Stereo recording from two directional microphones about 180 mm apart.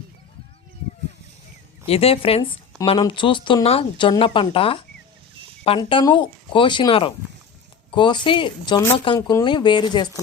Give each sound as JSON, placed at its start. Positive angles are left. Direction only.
{"t": 1.9, "sound": "a woman's voice", "side_deg": 35}